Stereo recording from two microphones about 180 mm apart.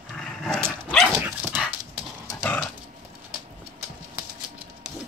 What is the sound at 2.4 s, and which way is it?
Dog, 5° left (ahead or behind).